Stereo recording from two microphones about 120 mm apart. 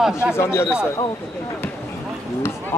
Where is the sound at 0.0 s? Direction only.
5° right (ahead or behind).